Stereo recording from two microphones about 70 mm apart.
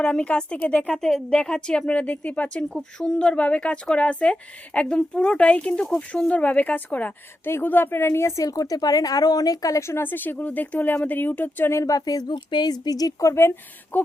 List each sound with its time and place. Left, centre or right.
0.0 s a woman's voice: centre; by 8.4 s left
8.4 s speech: left
9.8 s speech: left
11.8 s speech: left
13.9 s speech: left